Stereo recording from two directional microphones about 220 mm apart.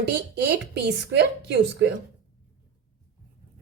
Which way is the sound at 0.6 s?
50° right (ahead or behind).